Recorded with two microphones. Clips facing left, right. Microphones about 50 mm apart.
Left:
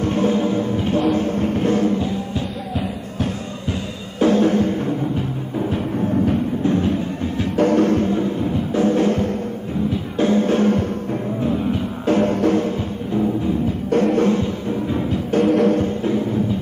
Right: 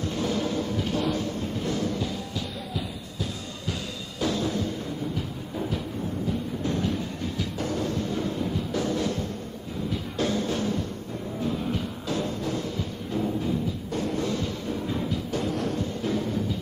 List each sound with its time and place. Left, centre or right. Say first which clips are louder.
0.0 s music: left 9 dB; left
1.1 s music: left 10 dB; left
4.2 s drum: left 12 dB; left
6.6 s music: left 9 dB; left
7.5 s music: left 16 dB; left
8.1 s music: left 8 dB; left
10.1 s drum: left 10 dB; left
11.4 s music: left 7 dB; left
12.1 s music: left 13 dB; left
14.3 s music: left 8 dB; left
15.4 s music: left 17 dB; left
16.0 s music: left 7 dB; left